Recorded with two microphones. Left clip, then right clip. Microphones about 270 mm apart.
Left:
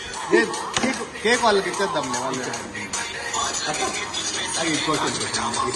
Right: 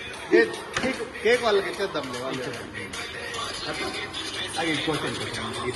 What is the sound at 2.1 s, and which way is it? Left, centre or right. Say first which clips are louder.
Speech: left 5 dB; left.